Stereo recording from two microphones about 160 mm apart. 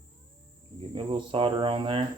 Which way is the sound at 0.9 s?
30° right (ahead or behind).